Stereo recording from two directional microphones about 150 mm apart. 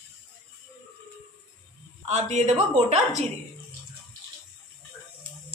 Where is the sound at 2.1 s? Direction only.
50° right (ahead or behind).